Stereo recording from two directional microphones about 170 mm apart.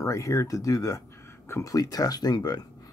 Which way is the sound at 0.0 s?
20° left (ahead or behind).